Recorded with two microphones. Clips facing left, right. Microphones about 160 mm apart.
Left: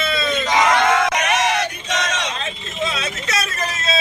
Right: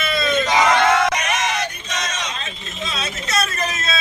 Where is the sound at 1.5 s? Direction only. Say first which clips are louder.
Left 3 dB; 75° left (ahead or behind); by 3.3 s 60° left (ahead or behind).